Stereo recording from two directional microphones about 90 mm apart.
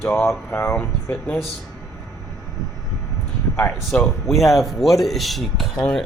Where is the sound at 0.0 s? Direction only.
30° left (ahead or behind).